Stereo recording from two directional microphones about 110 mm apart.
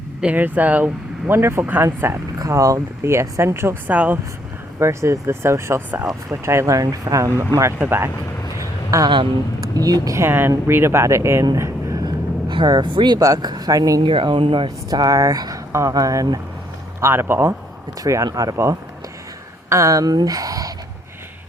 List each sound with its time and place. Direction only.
0.2 s speech: 15° right (ahead or behind)
3.9 s speech: 15° right (ahead or behind)
4.8 s speech: 25° right (ahead or behind)
8.5 s a sound: 30° right (ahead or behind)
9.7 s speech: 35° right (ahead or behind)
11.4 s a sound: 30° right (ahead or behind)
12.5 s speech: 40° right (ahead or behind)
14.0 s speech: 50° right (ahead or behind)
14.8 s speech: 35° right (ahead or behind)
17.0 s speech: 20° right (ahead or behind)
18.0 s speech: 30° right (ahead or behind)